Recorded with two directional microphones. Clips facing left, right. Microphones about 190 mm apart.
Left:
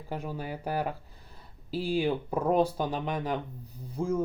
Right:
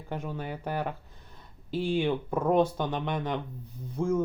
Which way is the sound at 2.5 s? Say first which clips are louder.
Right 1 dB; 35° left (ahead or behind).